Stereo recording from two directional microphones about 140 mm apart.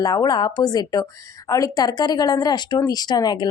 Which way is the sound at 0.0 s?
30° left (ahead or behind).